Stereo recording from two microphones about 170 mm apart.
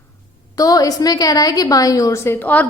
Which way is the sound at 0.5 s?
20° left (ahead or behind).